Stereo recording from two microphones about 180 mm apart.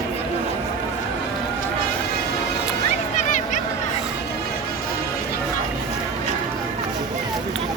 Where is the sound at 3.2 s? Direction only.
45° left (ahead or behind).